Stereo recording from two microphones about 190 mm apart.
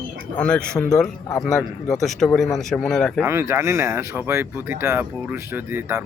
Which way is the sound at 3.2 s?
15° right (ahead or behind).